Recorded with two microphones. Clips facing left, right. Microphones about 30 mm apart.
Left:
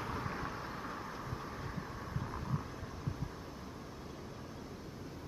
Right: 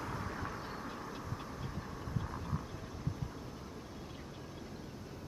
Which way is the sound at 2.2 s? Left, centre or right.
Centre.